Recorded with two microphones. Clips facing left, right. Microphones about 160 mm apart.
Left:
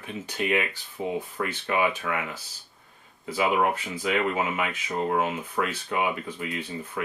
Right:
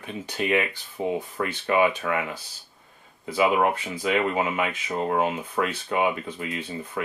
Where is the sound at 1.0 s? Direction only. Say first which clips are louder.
Right 2 dB; 30° right (ahead or behind).